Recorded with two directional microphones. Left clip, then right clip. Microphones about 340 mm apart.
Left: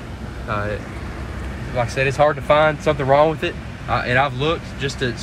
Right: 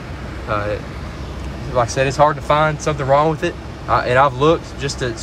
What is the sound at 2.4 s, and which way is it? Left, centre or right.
Speech, centre.